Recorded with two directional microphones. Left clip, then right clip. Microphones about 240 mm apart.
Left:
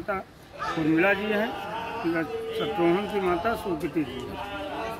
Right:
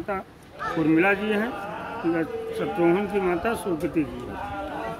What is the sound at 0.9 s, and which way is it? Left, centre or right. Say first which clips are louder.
Speech: right 1 dB; centre.